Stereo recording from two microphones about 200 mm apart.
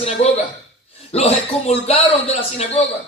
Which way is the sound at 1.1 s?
30° left (ahead or behind).